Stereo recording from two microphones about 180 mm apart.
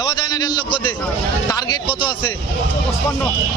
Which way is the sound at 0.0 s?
25° left (ahead or behind).